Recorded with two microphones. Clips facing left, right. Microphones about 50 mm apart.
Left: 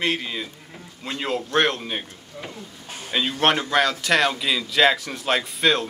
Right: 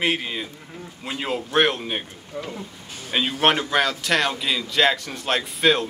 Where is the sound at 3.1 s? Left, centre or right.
Centre.